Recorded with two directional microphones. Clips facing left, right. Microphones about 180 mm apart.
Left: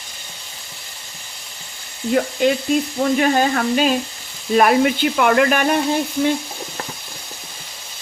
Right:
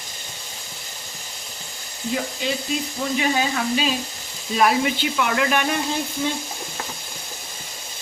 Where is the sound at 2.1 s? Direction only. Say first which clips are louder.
Left 9 dB; 55° left (ahead or behind).